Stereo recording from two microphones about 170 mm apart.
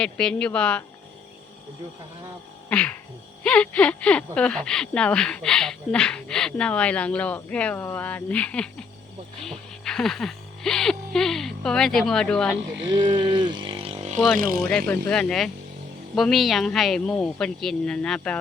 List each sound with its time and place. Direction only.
0.0 s speech: 5° left (ahead or behind)
2.6 s a sound: 5° left (ahead or behind)
3.4 s speech: 5° left (ahead or behind)
13.1 s speech: 25° right (ahead or behind)
14.3 s speech: 55° right (ahead or behind)
14.6 s speech: 5° left (ahead or behind)